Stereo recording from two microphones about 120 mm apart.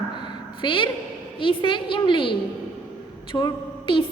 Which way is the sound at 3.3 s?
40° left (ahead or behind).